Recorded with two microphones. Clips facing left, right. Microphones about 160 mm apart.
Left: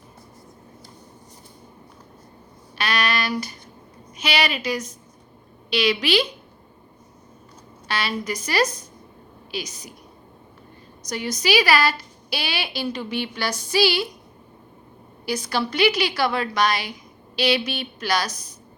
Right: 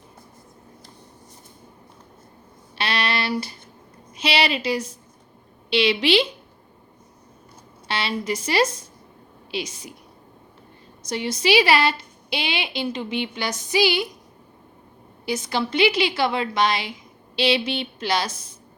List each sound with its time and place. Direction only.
2.7 s a sound: 30° right (ahead or behind)
4.2 s a woman's voice: 30° right (ahead or behind)
7.9 s a woman's voice: 25° right (ahead or behind)
11.0 s a woman's voice: 25° right (ahead or behind)
15.3 s a woman's voice: 20° right (ahead or behind)